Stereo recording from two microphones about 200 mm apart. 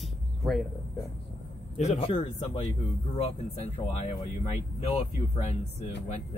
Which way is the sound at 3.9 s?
35° left (ahead or behind).